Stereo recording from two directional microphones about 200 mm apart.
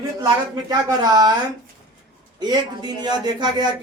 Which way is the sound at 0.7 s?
20° right (ahead or behind).